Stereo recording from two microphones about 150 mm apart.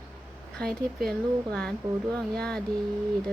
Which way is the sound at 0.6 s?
5° left (ahead or behind).